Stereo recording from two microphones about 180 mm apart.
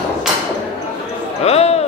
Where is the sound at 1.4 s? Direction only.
35° left (ahead or behind).